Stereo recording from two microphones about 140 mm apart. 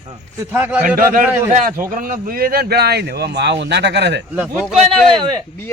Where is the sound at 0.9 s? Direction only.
90° right.